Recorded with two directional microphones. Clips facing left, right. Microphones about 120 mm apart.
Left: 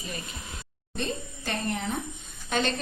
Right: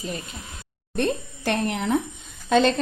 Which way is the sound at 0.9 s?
70° right (ahead or behind).